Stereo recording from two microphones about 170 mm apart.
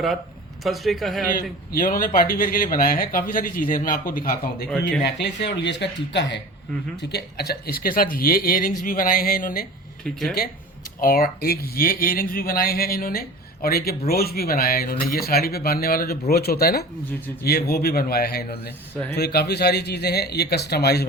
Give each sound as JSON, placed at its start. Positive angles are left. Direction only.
{"t": 0.6, "sound": "a man's voice", "side_deg": 0}
{"t": 1.3, "sound": "speech", "side_deg": 55}
{"t": 5.0, "sound": "speech", "side_deg": 80}
{"t": 5.6, "sound": "speech", "side_deg": 90}
{"t": 7.1, "sound": "speech", "side_deg": 65}
{"t": 10.0, "sound": "a man's voice", "side_deg": 0}
{"t": 11.0, "sound": "speech", "side_deg": 60}